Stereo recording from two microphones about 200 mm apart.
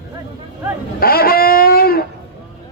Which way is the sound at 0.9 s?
50° left (ahead or behind).